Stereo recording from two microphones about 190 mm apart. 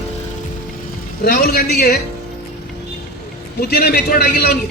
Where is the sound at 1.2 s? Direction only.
50° left (ahead or behind).